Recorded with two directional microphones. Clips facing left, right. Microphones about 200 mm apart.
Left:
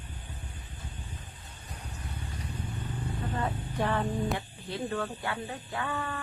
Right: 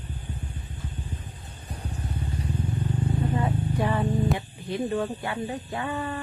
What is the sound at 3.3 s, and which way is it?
Vehicle, 10° right (ahead or behind).